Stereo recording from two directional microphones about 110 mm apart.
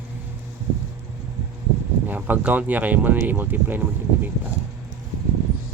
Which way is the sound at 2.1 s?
15° right (ahead or behind).